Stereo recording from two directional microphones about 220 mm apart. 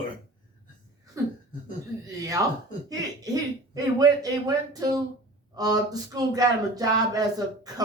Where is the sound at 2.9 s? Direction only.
15° right (ahead or behind).